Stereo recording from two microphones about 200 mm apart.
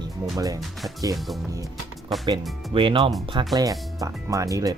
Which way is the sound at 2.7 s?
25° right (ahead or behind).